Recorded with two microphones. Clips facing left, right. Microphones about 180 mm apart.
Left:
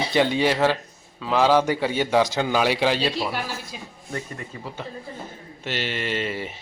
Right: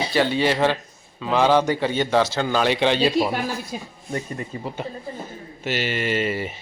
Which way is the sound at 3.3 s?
45° right (ahead or behind).